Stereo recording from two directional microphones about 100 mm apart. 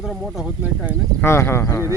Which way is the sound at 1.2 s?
25° left (ahead or behind).